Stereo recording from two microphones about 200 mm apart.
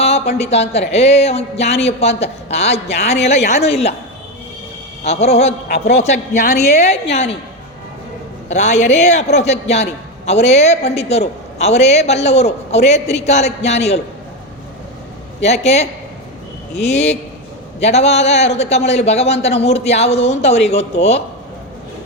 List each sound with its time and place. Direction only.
0.0 s a man's voice: 30° left (ahead or behind)
5.0 s a man's voice: 30° left (ahead or behind)
8.4 s a man's voice: 35° left (ahead or behind)
15.4 s a man's voice: 35° left (ahead or behind)